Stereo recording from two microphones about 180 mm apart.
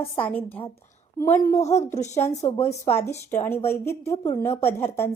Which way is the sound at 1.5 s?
40° left (ahead or behind).